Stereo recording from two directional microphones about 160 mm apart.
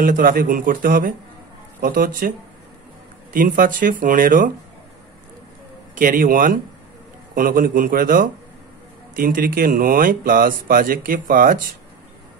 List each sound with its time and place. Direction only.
0.0 s speech: 60° right (ahead or behind)
3.3 s speech: 60° right (ahead or behind)
5.9 s speech: 60° right (ahead or behind)